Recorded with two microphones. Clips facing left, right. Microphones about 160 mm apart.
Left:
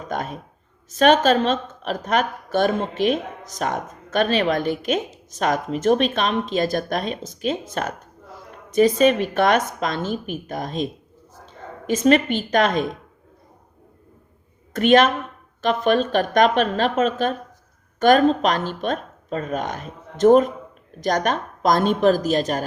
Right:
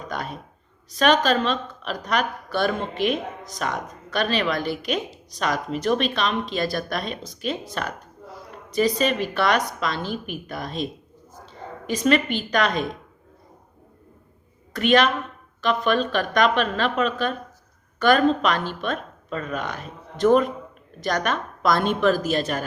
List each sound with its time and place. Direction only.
0.1 s a sound: 45° left (ahead or behind)
1.2 s a woman's voice: 45° left (ahead or behind)
14.8 s speech: 45° left (ahead or behind)